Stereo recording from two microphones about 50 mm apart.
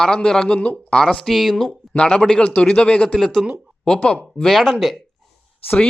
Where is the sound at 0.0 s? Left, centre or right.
Centre.